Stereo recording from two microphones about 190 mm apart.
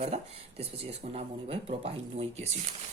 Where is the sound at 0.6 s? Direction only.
30° right (ahead or behind).